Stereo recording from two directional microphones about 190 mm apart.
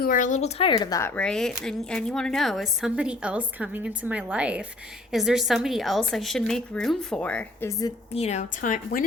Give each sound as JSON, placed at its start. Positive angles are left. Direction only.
{"t": 0.0, "sound": "speech", "side_deg": 45}
{"t": 8.1, "sound": "a woman's voice", "side_deg": 35}